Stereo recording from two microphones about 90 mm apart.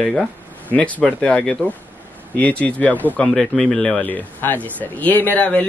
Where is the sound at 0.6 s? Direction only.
15° left (ahead or behind).